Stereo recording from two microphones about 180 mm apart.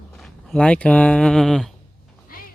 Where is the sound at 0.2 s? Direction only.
5° left (ahead or behind).